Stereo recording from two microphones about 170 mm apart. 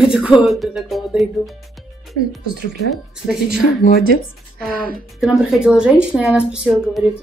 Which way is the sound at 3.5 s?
55° left (ahead or behind).